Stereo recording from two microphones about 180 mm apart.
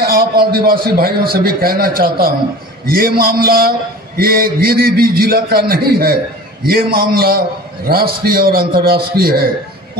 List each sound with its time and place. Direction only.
0.0 s a man's voice: 55° right (ahead or behind)